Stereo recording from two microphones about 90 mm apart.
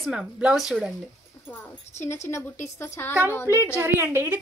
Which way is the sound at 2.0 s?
30° left (ahead or behind).